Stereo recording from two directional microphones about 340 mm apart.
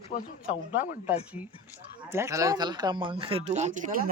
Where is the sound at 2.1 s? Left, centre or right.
Centre.